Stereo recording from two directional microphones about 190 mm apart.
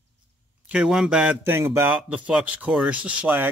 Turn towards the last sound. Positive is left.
turn(degrees=-10)  # may be behind; listen again after turning